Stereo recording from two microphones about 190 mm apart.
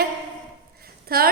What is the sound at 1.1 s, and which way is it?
Speech, 50° right (ahead or behind).